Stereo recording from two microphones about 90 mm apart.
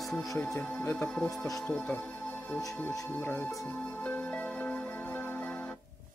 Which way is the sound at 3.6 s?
15° left (ahead or behind).